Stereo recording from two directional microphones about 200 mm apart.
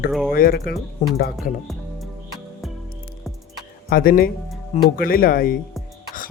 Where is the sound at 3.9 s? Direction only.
45° left (ahead or behind).